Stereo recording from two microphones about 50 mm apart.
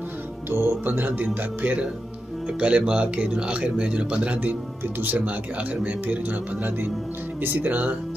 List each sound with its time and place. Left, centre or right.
0.5 s speech: right
2.4 s speech: right